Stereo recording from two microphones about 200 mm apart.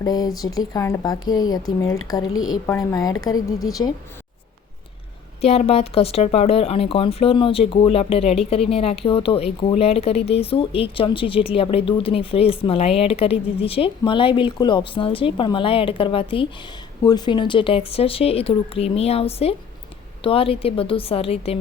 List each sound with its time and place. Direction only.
0.0 s speech: 20° left (ahead or behind)
2.2 s a woman's voice: 90° left
2.6 s a woman's voice: 15° left (ahead or behind)
5.4 s speech: 30° left (ahead or behind)